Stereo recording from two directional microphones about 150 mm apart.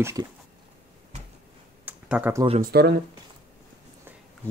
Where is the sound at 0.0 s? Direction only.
20° right (ahead or behind).